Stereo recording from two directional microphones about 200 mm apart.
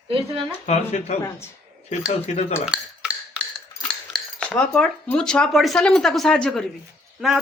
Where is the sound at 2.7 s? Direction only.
5° right (ahead or behind).